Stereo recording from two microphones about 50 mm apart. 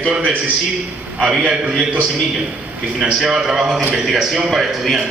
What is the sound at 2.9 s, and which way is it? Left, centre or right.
A man's voice, centre.